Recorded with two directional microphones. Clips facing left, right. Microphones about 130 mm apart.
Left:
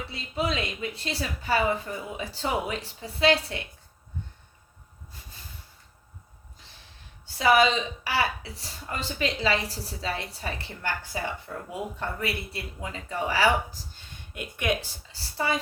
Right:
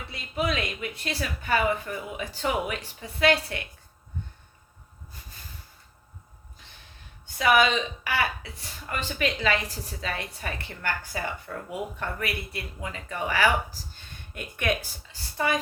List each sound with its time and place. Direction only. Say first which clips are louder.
0.1 s a woman's voice: right 2 dB; 25° left (ahead or behind)
7.3 s a woman's voice: left 1 dB; 30° left (ahead or behind)
13.9 s a sound: even; 15° left (ahead or behind)
15.1 s a woman's voice: right 1 dB; 30° left (ahead or behind)